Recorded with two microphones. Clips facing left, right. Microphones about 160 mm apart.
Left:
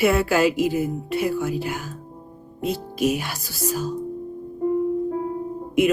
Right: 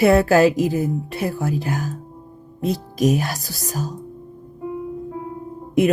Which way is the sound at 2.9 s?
40° right (ahead or behind).